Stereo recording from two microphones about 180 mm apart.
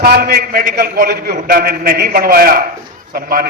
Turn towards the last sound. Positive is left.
turn(degrees=-55)  # may be behind; listen again after turning